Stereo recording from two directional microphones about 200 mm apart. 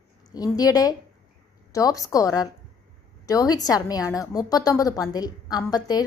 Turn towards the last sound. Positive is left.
turn(degrees=20)  # may be behind; listen again after turning